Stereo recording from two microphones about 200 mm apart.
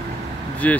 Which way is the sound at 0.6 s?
5° left (ahead or behind).